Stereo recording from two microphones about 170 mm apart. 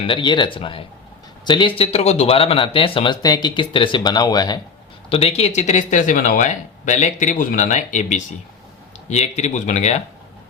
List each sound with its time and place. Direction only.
0.0 s a man's voice: 30° left (ahead or behind)
5.0 s speech: 35° left (ahead or behind)